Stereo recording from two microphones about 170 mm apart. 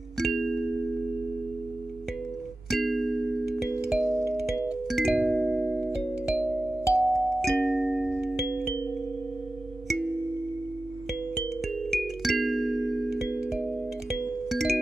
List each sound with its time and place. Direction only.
0.2 s music: centre (ahead or behind)
2.7 s music: centre (ahead or behind)
4.0 s music: 15° right (ahead or behind)
4.5 s music: 5° right (ahead or behind)
11.9 s music: centre (ahead or behind)